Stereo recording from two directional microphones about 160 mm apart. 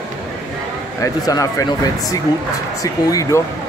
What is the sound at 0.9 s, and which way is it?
Speech, 20° left (ahead or behind).